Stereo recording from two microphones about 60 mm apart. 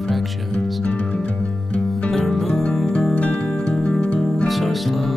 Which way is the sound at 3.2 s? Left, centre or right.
Centre.